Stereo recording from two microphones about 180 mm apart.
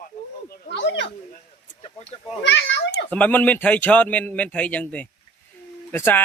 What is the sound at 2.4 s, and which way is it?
Speech, 75° left (ahead or behind).